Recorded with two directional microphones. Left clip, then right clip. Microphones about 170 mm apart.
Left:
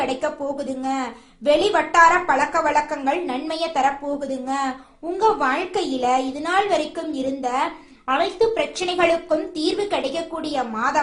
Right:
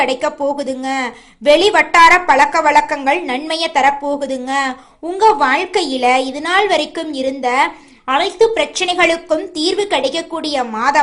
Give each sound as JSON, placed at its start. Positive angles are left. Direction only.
{"t": 0.0, "sound": "a woman's voice", "side_deg": -20}